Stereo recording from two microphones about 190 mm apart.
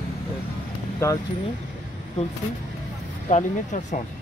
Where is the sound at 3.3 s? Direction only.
40° left (ahead or behind).